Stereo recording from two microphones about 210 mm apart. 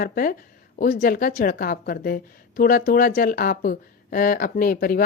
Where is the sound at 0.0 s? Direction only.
45° left (ahead or behind).